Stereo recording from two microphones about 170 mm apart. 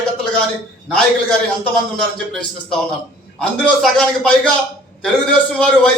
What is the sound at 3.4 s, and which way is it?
A man's voice, 5° left (ahead or behind).